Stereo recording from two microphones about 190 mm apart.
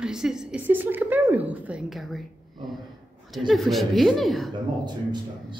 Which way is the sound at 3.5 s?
Centre (ahead or behind).